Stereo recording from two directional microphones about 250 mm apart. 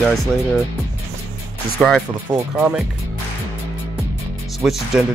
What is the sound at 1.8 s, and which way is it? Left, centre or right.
Speech, centre.